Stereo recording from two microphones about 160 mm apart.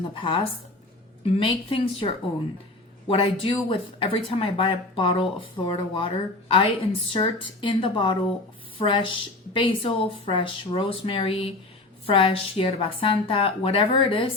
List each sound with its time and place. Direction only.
0.1 s speech: 30° left (ahead or behind)